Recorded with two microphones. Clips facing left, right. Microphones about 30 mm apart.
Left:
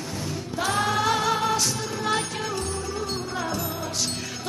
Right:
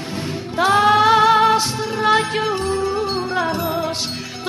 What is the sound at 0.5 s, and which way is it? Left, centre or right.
Music, right.